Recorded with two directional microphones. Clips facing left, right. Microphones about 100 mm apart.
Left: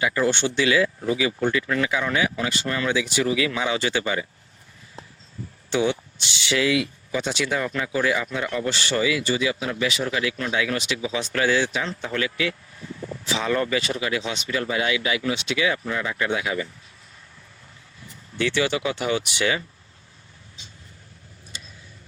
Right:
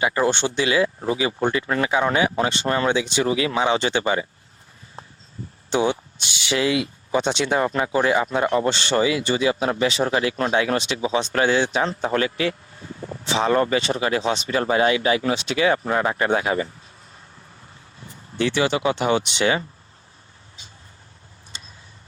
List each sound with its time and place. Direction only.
0.0 s speech: 30° right (ahead or behind)
0.3 s speech: 20° right (ahead or behind)
6.5 s speech: 30° right (ahead or behind)
18.3 s speech: 25° right (ahead or behind)
21.5 s a sound: 30° right (ahead or behind)